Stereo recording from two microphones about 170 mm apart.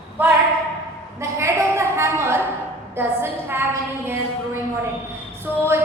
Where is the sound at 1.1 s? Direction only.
15° right (ahead or behind).